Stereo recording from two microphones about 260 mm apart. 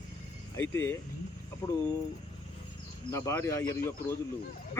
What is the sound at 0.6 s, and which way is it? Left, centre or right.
Speech, centre.